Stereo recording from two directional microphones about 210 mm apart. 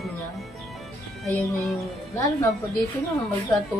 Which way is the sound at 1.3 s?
5° left (ahead or behind).